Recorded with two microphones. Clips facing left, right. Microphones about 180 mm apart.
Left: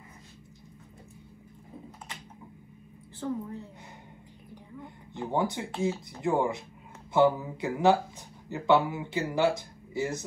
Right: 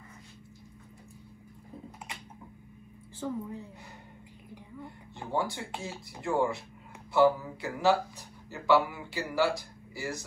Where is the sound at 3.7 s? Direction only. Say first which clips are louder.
Left 1 dB; 20° left (ahead or behind).